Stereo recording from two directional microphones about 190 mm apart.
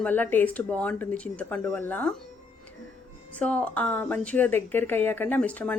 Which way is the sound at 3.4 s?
5° left (ahead or behind).